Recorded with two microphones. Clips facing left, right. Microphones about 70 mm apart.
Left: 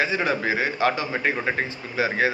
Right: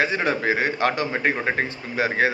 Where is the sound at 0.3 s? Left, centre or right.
Right.